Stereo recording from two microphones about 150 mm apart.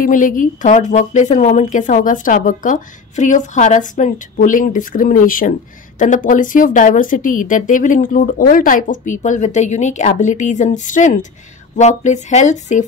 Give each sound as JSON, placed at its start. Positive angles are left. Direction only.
{"t": 0.0, "sound": "a woman's voice", "side_deg": 60}